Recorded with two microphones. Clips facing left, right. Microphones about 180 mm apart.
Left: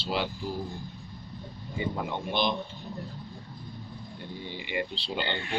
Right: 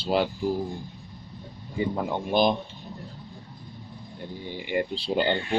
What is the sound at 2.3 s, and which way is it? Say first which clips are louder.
Speech: right 7 dB; 45° right (ahead or behind).